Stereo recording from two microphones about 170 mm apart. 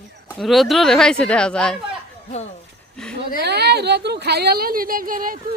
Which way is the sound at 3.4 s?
75° right (ahead or behind).